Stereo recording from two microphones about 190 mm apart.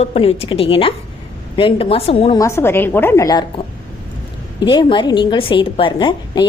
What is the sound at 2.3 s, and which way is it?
A woman's voice, 15° left (ahead or behind).